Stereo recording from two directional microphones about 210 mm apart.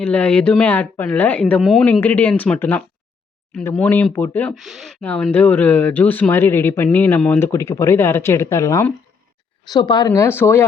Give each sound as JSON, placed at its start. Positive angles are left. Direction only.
{"t": 0.0, "sound": "speech", "side_deg": 5}